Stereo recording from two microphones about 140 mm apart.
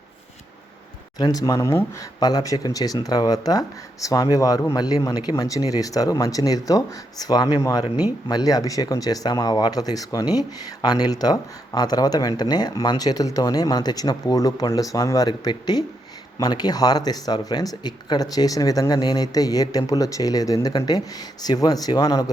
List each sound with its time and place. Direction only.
1.2 s speech: 25° left (ahead or behind)